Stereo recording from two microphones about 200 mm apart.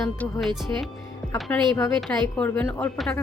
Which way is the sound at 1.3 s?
15° left (ahead or behind).